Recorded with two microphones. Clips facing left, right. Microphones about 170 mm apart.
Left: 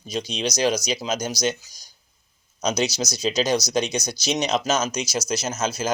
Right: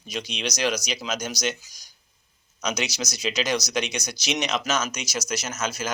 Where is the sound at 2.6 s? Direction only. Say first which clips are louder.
Left 5 dB; 30° left (ahead or behind).